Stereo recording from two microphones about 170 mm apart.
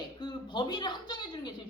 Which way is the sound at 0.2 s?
25° left (ahead or behind).